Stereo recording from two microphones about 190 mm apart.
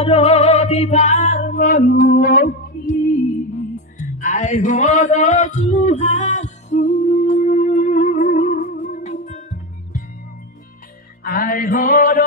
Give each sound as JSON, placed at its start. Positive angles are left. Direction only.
{"t": 0.0, "sound": "music", "side_deg": 35}
{"t": 11.2, "sound": "mantra", "side_deg": 50}